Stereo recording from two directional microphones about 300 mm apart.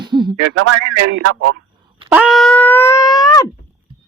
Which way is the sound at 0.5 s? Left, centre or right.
Right.